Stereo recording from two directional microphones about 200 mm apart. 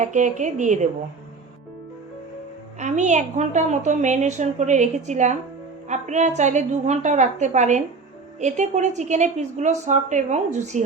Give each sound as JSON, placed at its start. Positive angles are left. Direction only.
{"t": 0.0, "sound": "a woman's voice", "side_deg": -40}
{"t": 2.7, "sound": "a woman's voice", "side_deg": -35}